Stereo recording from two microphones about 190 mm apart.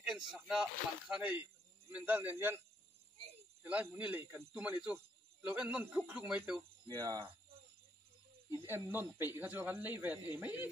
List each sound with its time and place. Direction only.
0.0 s speech: 5° right (ahead or behind)
3.6 s speech: 10° right (ahead or behind)
6.9 s speech: 20° right (ahead or behind)
8.5 s speech: 15° right (ahead or behind)